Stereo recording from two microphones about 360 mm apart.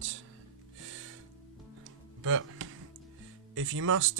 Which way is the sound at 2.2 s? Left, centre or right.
Right.